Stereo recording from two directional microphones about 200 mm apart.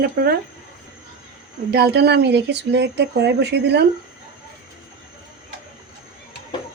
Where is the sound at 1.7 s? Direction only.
50° right (ahead or behind).